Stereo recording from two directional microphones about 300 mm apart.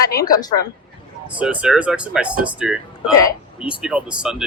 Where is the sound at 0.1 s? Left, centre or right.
Left.